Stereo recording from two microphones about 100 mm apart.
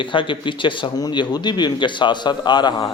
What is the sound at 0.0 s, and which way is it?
A man's voice, 55° left (ahead or behind).